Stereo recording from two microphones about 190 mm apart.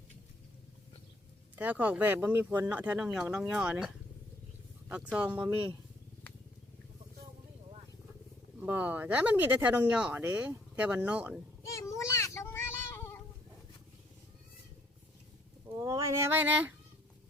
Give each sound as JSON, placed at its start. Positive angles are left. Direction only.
{"t": 1.5, "sound": "speech", "side_deg": -10}
{"t": 5.1, "sound": "speech", "side_deg": -10}
{"t": 8.6, "sound": "speech", "side_deg": -10}
{"t": 11.6, "sound": "child singing", "side_deg": 15}
{"t": 15.8, "sound": "speech", "side_deg": -20}